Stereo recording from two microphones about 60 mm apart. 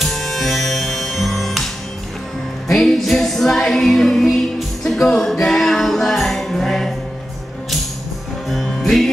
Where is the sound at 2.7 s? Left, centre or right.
Centre.